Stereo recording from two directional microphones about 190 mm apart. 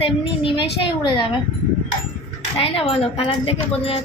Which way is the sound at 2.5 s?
30° left (ahead or behind).